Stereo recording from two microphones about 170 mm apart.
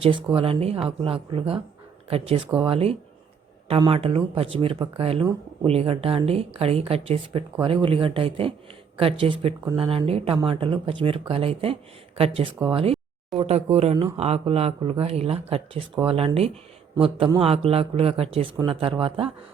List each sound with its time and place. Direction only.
0.0 s speech: 30° right (ahead or behind)